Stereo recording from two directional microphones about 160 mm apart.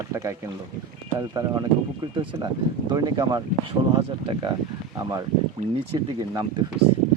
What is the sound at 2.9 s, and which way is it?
Speech, 25° right (ahead or behind).